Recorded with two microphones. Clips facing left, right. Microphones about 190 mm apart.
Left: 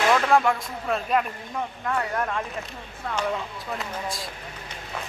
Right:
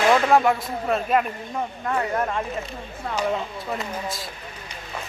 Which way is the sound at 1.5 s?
20° right (ahead or behind).